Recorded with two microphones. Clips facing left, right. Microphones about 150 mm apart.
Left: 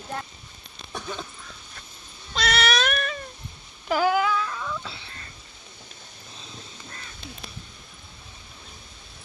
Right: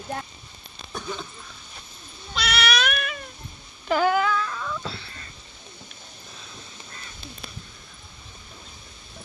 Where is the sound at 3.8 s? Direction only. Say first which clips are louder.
Right 1 dB; 5° left (ahead or behind).